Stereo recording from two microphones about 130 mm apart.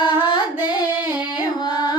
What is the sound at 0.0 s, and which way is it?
Singing, 35° left (ahead or behind).